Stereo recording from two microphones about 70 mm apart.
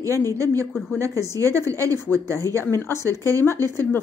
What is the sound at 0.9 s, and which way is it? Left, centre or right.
A woman's voice, right.